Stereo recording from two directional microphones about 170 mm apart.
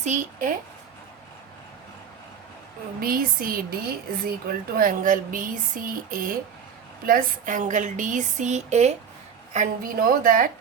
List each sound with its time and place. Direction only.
0.0 s speech: 45° right (ahead or behind)
3.0 s speech: 55° right (ahead or behind)